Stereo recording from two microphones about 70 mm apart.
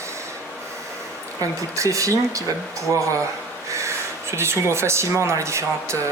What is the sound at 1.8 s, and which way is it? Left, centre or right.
Speech, right.